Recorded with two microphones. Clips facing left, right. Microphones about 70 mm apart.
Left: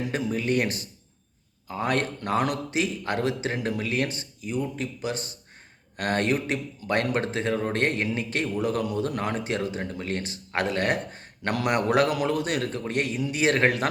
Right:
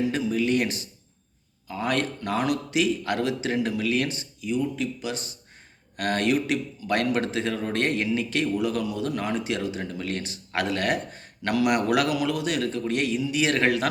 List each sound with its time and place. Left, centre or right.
0.1 s a man's voice: left